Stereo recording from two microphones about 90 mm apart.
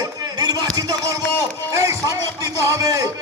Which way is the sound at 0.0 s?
45° right (ahead or behind).